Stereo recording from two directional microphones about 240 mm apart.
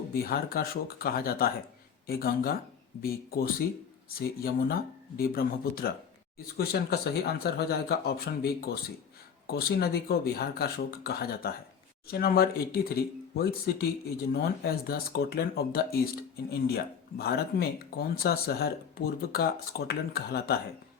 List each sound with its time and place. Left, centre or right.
0.1 s speech: left